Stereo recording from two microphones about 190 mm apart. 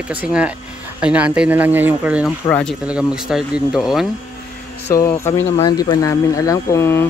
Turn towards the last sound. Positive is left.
turn(degrees=15)  # may be behind; listen again after turning